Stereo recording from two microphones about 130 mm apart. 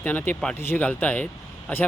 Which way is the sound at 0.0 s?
15° left (ahead or behind).